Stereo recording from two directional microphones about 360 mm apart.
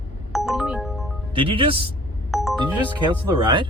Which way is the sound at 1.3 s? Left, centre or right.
Centre.